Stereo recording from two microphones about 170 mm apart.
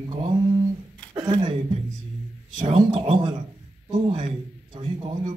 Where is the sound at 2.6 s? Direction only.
30° right (ahead or behind).